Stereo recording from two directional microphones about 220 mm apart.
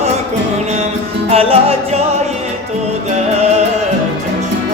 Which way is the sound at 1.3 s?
25° right (ahead or behind).